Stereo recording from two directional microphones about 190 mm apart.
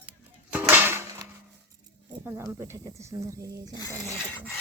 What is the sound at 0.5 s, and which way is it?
Dishes, 10° right (ahead or behind).